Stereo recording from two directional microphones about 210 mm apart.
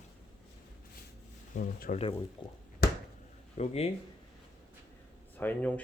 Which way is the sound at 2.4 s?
20° left (ahead or behind).